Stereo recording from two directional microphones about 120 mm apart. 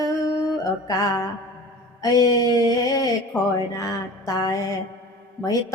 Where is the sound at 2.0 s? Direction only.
30° left (ahead or behind).